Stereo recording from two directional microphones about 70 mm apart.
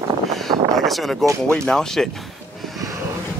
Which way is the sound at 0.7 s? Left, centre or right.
Centre.